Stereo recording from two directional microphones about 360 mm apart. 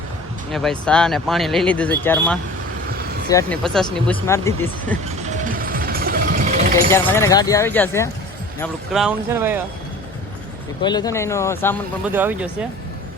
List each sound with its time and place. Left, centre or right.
0.5 s speech: centre
5.0 s music: right
6.9 s speech: centre
10.8 s speech: centre
12.1 s speech: centre